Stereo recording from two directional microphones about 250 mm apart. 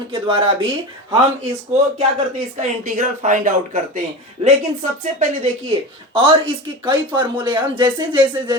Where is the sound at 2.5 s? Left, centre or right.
Right.